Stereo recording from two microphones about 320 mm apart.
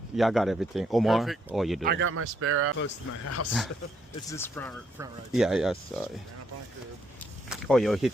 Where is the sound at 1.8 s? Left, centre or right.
Right.